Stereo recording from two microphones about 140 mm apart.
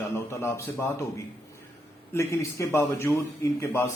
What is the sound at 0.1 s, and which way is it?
Speech, 20° left (ahead or behind).